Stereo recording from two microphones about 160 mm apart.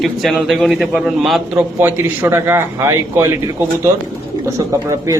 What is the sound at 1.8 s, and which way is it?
A man's voice, 15° right (ahead or behind).